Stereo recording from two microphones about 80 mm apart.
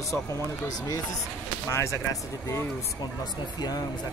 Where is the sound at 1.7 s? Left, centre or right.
Left.